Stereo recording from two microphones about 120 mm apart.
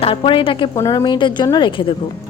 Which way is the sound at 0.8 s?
30° left (ahead or behind).